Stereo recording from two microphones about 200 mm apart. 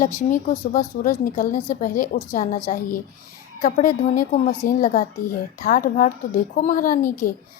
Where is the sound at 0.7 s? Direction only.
40° left (ahead or behind).